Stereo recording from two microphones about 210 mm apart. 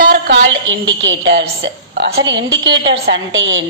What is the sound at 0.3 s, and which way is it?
A woman's voice, 65° right (ahead or behind).